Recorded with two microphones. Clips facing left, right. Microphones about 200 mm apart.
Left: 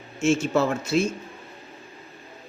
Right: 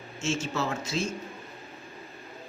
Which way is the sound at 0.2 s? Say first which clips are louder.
Left 9 dB; 55° left (ahead or behind).